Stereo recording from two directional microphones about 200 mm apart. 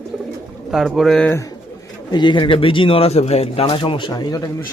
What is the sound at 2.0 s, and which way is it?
Speech, 20° left (ahead or behind).